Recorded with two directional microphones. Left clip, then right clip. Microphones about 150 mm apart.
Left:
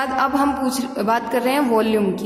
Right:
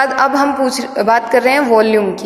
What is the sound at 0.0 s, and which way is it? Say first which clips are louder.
A woman's voice: right 7 dB; 35° right (ahead or behind).